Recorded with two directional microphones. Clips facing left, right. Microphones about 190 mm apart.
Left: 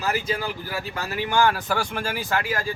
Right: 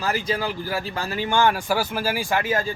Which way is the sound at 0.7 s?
30° right (ahead or behind).